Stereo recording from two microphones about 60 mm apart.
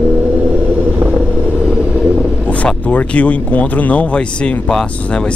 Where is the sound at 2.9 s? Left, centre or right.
Left.